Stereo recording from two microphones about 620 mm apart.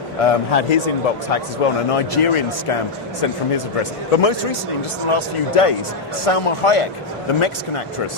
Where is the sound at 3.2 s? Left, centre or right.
Left.